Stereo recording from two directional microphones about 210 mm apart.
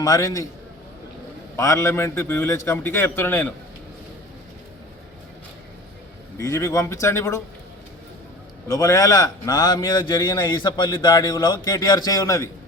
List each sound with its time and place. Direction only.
0.0 s a man's voice: 15° left (ahead or behind)
1.5 s a man's voice: 15° left (ahead or behind)
6.3 s a man's voice: 15° left (ahead or behind)
8.6 s a man's voice: 15° left (ahead or behind)